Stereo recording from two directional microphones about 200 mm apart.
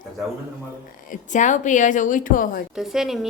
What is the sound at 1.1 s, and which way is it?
Speech, 40° left (ahead or behind).